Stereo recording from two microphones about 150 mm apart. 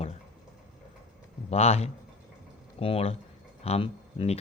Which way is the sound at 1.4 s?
45° left (ahead or behind).